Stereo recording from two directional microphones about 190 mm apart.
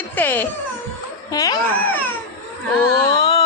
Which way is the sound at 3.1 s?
20° left (ahead or behind).